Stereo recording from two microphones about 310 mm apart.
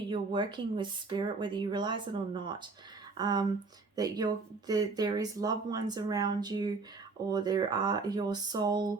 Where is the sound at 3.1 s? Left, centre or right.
Centre.